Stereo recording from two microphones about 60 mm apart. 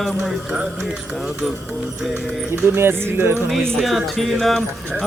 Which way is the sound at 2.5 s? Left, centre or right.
Right.